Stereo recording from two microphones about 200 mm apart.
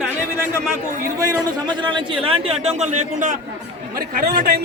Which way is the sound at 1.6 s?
25° right (ahead or behind).